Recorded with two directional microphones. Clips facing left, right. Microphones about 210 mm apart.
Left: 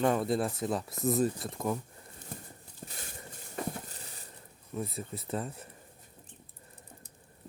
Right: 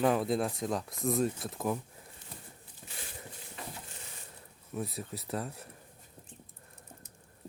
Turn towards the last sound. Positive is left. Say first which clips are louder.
# left 1 dB
turn(degrees=0)  # may be behind; listen again after turning